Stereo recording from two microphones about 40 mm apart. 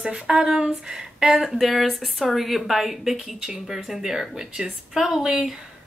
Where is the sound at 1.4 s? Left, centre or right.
Centre.